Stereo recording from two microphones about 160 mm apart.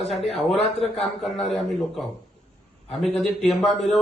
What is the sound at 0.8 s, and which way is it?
Speech, centre (ahead or behind).